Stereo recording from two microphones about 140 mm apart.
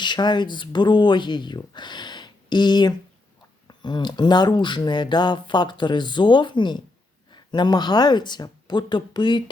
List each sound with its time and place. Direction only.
0.0 s speech: 30° left (ahead or behind)